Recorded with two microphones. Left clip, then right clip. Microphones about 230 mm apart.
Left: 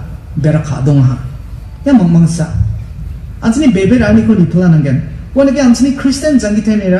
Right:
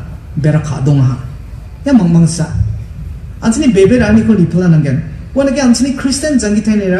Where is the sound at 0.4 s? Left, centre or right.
Right.